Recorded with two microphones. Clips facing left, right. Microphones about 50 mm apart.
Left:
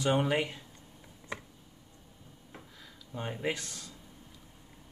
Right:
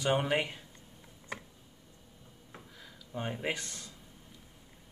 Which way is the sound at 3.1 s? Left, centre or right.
Centre.